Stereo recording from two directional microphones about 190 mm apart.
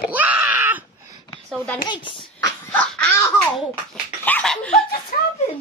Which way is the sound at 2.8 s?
5° left (ahead or behind).